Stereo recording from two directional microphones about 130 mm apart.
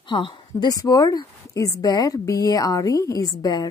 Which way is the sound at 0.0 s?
40° left (ahead or behind).